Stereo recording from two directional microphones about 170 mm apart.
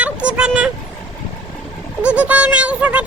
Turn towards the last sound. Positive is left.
turn(degrees=-5)  # may be behind; listen again after turning